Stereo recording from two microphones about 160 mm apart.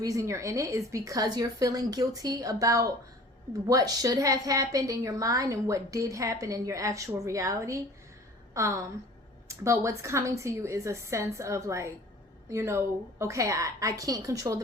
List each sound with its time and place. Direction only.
0.0 s a woman's voice: 20° right (ahead or behind)